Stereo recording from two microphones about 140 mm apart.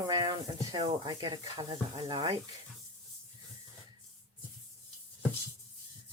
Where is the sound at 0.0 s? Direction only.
30° right (ahead or behind).